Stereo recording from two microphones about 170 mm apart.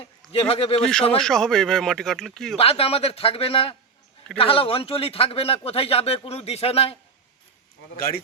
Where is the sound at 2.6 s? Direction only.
35° left (ahead or behind).